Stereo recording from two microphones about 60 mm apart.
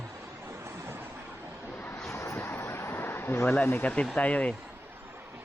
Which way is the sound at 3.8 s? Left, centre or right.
Left.